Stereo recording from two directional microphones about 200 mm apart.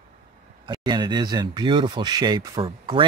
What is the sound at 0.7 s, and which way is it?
Speech, 20° right (ahead or behind).